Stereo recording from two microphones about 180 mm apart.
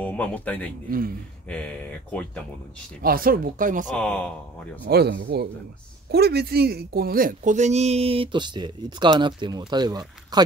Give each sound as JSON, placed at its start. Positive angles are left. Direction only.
{"t": 0.0, "sound": "a man's voice", "side_deg": 10}
{"t": 0.8, "sound": "speech", "side_deg": -55}
{"t": 1.5, "sound": "speech", "side_deg": 5}
{"t": 3.0, "sound": "speech", "side_deg": -55}
{"t": 3.9, "sound": "speech", "side_deg": 5}
{"t": 4.8, "sound": "speech", "side_deg": -60}